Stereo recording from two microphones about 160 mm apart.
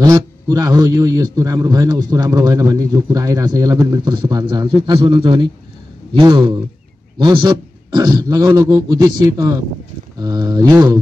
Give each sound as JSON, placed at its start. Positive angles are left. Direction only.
{"t": 0.0, "sound": "a man's voice", "side_deg": -20}